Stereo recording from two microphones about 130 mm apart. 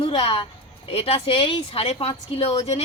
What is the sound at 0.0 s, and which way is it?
A woman's voice, 40° left (ahead or behind).